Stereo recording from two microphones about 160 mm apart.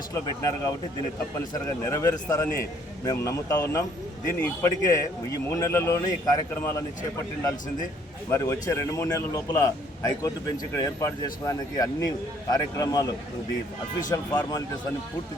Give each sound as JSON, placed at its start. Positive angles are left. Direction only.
{"t": 0.1, "sound": "a man's voice", "side_deg": 20}
{"t": 8.3, "sound": "a man's voice", "side_deg": 20}